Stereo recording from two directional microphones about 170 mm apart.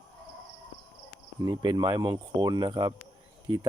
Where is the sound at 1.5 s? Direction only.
25° right (ahead or behind).